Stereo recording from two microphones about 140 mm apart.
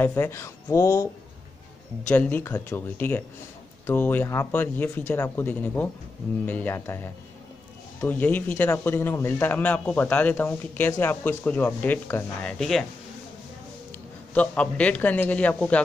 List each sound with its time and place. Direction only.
0.0 s speech: 15° left (ahead or behind)
2.0 s a man's voice: 15° left (ahead or behind)
12.5 s speech: centre (ahead or behind)
14.3 s a man's voice: 10° left (ahead or behind)